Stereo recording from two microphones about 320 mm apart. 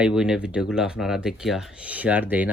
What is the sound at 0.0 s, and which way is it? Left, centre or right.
Speech, centre.